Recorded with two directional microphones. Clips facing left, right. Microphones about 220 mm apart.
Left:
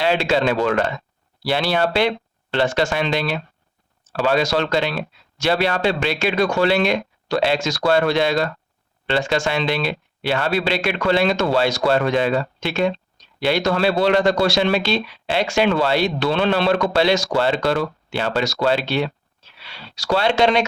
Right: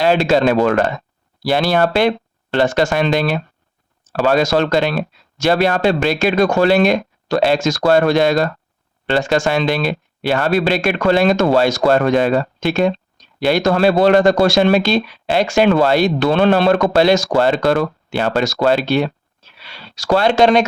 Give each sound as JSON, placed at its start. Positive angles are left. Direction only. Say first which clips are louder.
{"t": 0.0, "sound": "speech", "louder": "right 5 dB", "side_deg": -45}